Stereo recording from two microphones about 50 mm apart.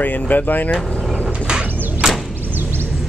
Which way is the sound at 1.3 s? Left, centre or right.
Centre.